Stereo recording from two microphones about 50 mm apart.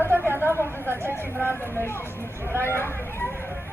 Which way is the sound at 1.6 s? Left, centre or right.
Left.